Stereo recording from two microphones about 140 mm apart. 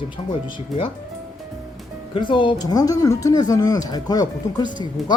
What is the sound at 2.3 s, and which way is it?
Speech, 35° left (ahead or behind).